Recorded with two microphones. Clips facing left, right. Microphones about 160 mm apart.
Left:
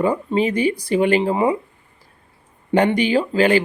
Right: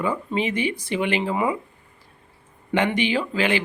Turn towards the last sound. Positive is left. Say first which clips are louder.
# left 7 dB
turn(degrees=40)  # may be behind; listen again after turning